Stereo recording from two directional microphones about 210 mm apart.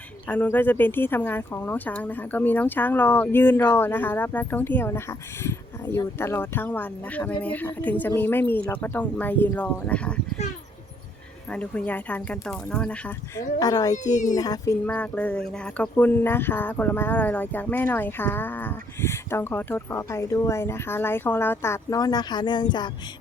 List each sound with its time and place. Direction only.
0.3 s speech: 10° left (ahead or behind)
11.5 s speech: 5° left (ahead or behind)
13.6 s speech: 15° left (ahead or behind)
13.9 s a child's voice: 35° left (ahead or behind)
14.3 s speech: 15° left (ahead or behind)